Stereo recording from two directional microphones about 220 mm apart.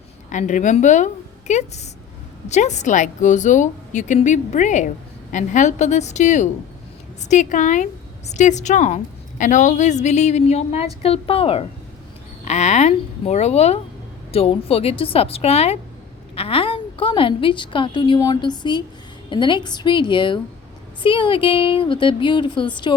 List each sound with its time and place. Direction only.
0.3 s a woman's voice: 35° left (ahead or behind)